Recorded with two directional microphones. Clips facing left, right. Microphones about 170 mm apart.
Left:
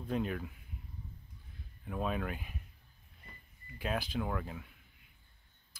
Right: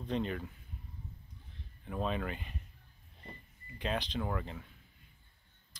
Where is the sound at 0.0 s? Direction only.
5° left (ahead or behind).